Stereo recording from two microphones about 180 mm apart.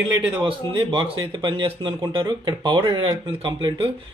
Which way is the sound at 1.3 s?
25° right (ahead or behind).